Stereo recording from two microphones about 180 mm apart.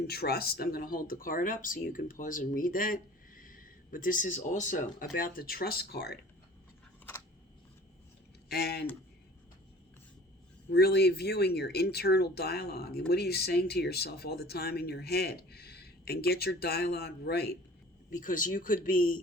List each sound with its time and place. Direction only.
0.1 s speech: 60° left (ahead or behind)
8.4 s speech: 65° left (ahead or behind)
10.7 s speech: 60° left (ahead or behind)
18.1 s speech: 50° left (ahead or behind)